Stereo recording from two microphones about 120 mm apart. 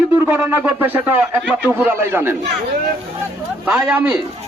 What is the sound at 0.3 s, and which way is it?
Speech, 15° right (ahead or behind).